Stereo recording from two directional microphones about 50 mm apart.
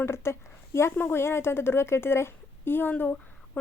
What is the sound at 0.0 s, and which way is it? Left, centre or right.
A woman's voice, left.